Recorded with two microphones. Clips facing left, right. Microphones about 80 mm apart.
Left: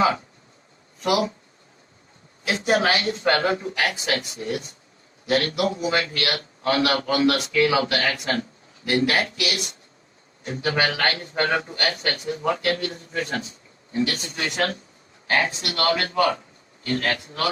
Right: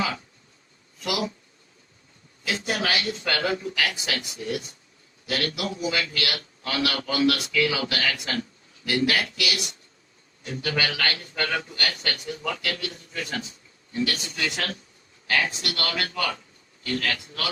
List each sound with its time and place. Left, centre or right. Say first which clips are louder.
0.9 s speech: left 6 dB; left
2.4 s a man's voice: left 7 dB; left